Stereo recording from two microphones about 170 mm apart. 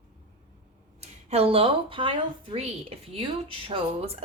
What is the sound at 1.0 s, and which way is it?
Speech, 40° right (ahead or behind).